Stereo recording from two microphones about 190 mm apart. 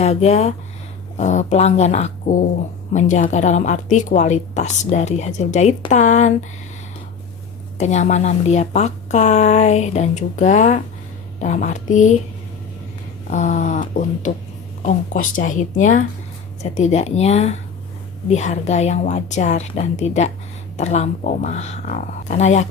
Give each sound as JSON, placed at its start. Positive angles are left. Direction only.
{"t": 0.0, "sound": "a woman's voice", "side_deg": 35}
{"t": 7.8, "sound": "a woman's voice", "side_deg": 35}
{"t": 13.3, "sound": "a woman's voice", "side_deg": 40}